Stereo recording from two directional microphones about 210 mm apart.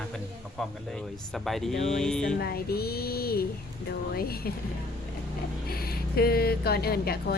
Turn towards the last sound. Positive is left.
turn(degrees=45)  # may be behind; listen again after turning